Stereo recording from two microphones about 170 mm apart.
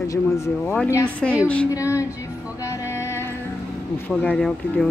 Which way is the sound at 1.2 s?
Centre (ahead or behind).